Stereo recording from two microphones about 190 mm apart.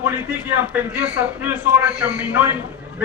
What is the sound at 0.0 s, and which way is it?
A man's voice, 10° right (ahead or behind).